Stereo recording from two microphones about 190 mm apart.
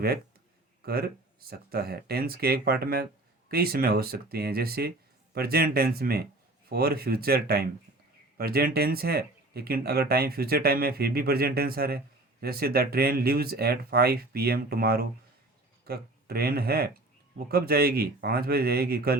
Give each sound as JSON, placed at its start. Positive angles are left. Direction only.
{"t": 0.9, "sound": "speech", "side_deg": -55}